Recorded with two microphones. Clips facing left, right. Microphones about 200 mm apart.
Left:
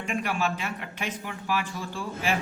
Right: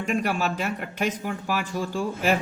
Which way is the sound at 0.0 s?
40° right (ahead or behind).